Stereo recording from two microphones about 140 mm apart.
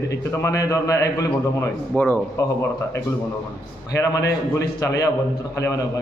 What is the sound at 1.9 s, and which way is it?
A man's voice, 10° left (ahead or behind).